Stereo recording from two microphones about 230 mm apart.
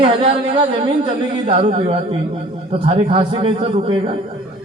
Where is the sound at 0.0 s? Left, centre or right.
Right.